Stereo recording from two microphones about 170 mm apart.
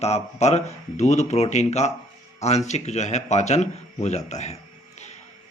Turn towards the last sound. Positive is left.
turn(degrees=40)  # may be behind; listen again after turning